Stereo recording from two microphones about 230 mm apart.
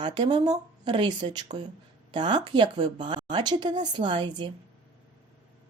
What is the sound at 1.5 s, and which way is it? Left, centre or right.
Speech, right.